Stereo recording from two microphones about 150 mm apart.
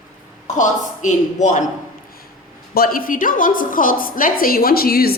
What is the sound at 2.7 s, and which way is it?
A woman's voice, 80° left.